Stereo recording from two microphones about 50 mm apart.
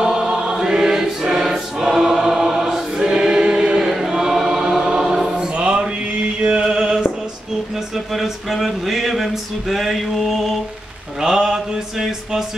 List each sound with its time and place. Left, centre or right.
0.0 s choir: centre
2.3 s choir: centre
5.5 s music: centre
7.7 s a sound: centre
11.1 s mantra: centre